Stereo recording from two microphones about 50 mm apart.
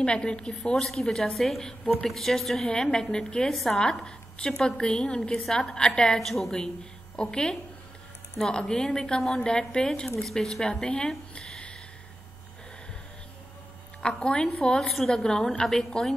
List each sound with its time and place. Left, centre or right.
0.0 s a woman's voice: left
5.1 s a woman's voice: centre
6.1 s a woman's voice: centre
11.3 s a sound: centre
14.2 s a woman's voice: centre